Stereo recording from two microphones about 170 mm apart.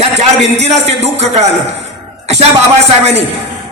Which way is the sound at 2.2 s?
40° right (ahead or behind).